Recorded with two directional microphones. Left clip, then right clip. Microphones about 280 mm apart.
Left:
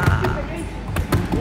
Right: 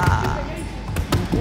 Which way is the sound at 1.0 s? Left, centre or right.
Centre.